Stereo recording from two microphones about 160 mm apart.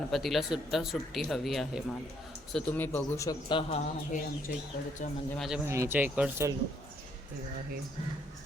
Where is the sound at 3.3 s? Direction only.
30° left (ahead or behind).